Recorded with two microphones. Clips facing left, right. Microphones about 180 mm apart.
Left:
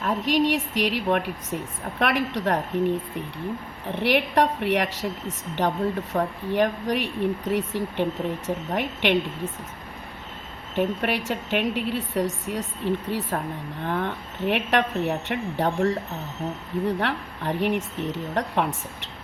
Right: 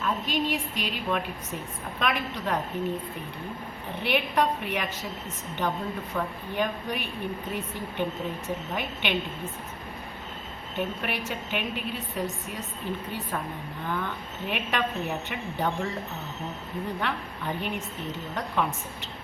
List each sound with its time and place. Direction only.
0.0 s a woman's voice: 75° left (ahead or behind)
4.0 s a woman's voice: 75° left (ahead or behind)
6.1 s speech: 35° left (ahead or behind)
6.5 s a woman's voice: 75° left (ahead or behind)
10.8 s a woman's voice: 75° left (ahead or behind)